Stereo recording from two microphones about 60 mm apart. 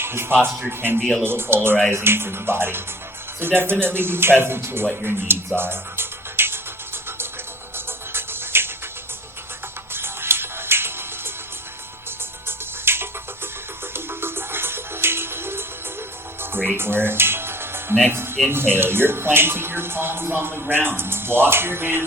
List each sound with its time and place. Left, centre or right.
0.0 s speech: right
0.9 s speech: centre
1.2 s speech: right
5.5 s music: right
9.9 s music: right
12.5 s music: right
16.6 s music: right
18.1 s speech: right